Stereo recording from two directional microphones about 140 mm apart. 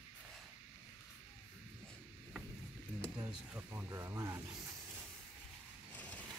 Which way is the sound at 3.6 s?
20° right (ahead or behind).